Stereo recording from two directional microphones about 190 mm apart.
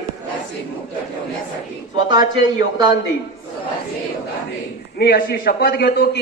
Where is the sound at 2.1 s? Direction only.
25° right (ahead or behind).